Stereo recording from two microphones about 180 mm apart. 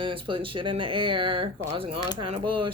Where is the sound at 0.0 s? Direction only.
30° right (ahead or behind).